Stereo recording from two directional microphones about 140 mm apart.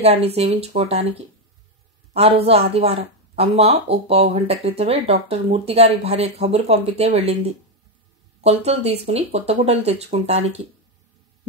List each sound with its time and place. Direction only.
0.0 s speech: 45° right (ahead or behind)